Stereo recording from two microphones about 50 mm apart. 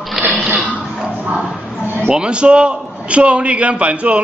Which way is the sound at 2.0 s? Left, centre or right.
Centre.